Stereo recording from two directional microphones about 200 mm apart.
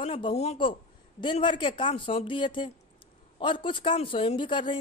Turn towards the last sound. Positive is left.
turn(degrees=25)  # may be behind; listen again after turning